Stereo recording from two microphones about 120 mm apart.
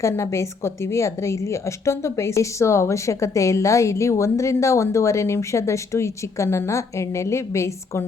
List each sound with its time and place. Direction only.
0.0 s a woman's voice: 25° left (ahead or behind)